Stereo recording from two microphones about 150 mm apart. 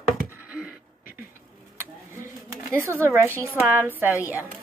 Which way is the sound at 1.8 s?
15° right (ahead or behind).